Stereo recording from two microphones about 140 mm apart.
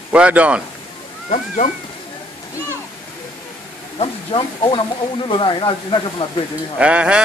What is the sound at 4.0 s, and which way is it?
Speech, 40° left (ahead or behind).